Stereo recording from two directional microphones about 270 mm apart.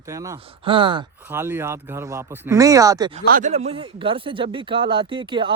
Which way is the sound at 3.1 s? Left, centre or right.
Right.